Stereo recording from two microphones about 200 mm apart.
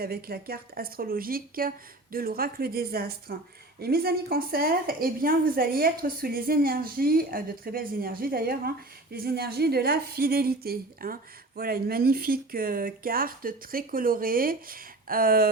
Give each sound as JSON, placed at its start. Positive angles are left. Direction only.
{"t": 0.0, "sound": "a woman's voice", "side_deg": -50}